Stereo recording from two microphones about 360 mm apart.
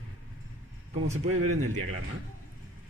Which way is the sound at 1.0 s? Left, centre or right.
Centre.